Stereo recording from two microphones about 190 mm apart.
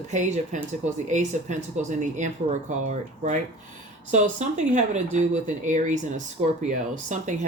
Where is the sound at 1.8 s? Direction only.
40° right (ahead or behind).